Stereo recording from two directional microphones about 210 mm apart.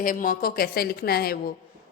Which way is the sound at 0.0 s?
40° left (ahead or behind).